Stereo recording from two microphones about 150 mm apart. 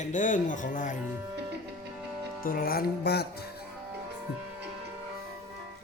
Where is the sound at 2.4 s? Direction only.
80° left.